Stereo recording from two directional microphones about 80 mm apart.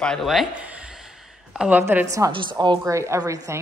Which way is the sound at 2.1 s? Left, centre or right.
Right.